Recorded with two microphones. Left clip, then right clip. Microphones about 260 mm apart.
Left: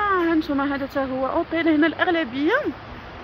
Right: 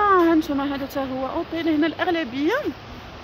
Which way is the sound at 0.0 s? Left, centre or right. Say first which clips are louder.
Right 3 dB; right.